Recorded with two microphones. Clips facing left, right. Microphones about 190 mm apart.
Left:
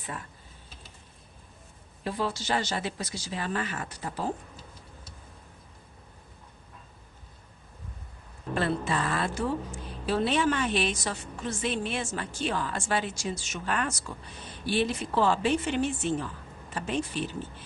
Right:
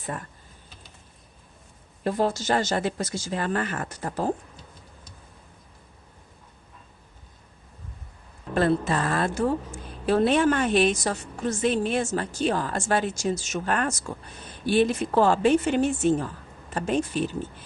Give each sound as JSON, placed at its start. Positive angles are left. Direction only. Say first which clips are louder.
{"t": 2.0, "sound": "a woman's voice", "louder": "right 6 dB", "side_deg": -45}
{"t": 8.5, "sound": "a woman's voice", "louder": "right 6 dB", "side_deg": -45}